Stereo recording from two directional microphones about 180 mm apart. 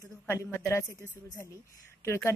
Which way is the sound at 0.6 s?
15° left (ahead or behind).